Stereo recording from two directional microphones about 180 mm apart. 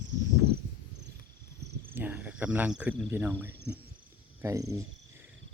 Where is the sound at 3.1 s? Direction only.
10° right (ahead or behind).